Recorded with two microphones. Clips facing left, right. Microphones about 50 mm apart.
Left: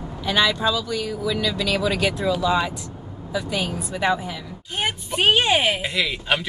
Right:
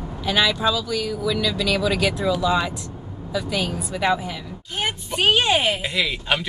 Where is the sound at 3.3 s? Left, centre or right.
Centre.